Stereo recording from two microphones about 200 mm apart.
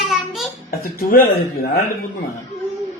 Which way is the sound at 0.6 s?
50° left (ahead or behind).